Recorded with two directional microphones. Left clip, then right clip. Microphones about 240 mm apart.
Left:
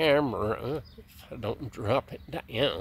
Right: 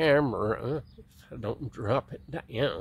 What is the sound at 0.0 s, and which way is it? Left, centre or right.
Speech, centre.